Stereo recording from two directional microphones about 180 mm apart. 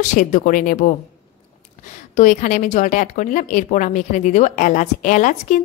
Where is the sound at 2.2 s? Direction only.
45° left (ahead or behind).